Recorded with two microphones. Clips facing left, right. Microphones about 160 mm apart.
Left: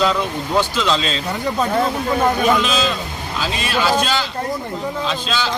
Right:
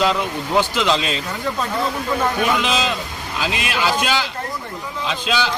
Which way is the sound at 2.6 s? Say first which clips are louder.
Left 1 dB; 15° right (ahead or behind).